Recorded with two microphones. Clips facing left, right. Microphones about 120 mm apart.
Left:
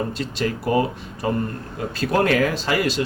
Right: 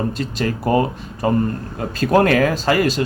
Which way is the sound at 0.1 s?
45° right (ahead or behind).